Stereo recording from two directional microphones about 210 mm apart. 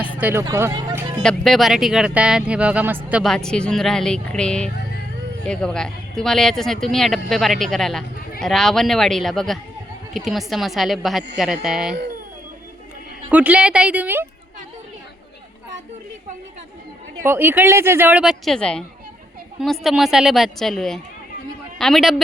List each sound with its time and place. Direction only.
0.2 s speech: 10° right (ahead or behind)
1.2 s speech: centre (ahead or behind)
13.3 s speech: 5° right (ahead or behind)
17.2 s a man's voice: 10° right (ahead or behind)